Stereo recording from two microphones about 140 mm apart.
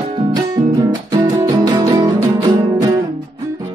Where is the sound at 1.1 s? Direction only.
25° right (ahead or behind).